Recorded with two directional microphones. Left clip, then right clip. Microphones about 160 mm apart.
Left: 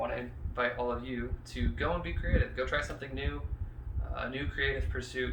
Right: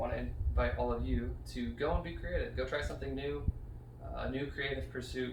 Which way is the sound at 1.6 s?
15° left (ahead or behind).